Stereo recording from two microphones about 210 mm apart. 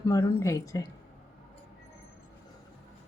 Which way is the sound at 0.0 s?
15° left (ahead or behind).